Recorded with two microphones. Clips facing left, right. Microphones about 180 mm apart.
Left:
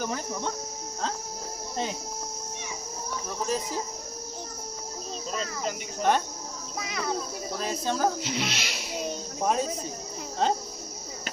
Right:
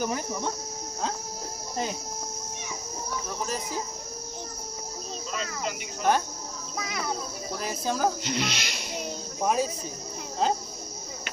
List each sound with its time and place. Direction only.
0.0 s speech: 10° right (ahead or behind)
1.7 s speech: 5° right (ahead or behind)
3.4 s speech: centre (ahead or behind)
5.3 s speech: 40° left (ahead or behind)
6.0 s speech: 5° right (ahead or behind)
7.6 s speech: 10° right (ahead or behind)
8.2 s speech: centre (ahead or behind)